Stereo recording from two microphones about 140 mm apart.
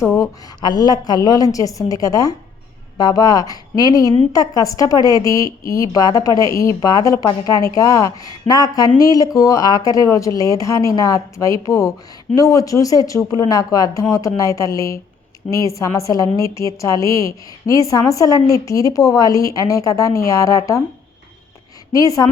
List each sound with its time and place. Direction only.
0.2 s a woman's voice: 30° left (ahead or behind)
21.9 s a woman's voice: 25° left (ahead or behind)